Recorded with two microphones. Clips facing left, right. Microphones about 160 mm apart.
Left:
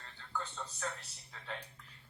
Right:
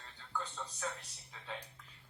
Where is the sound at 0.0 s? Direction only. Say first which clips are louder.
Even; 10° right (ahead or behind).